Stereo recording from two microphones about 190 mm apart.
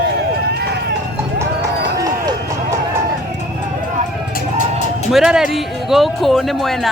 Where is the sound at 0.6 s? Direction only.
60° right (ahead or behind).